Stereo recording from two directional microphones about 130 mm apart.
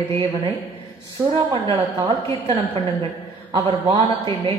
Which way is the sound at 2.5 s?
45° right (ahead or behind).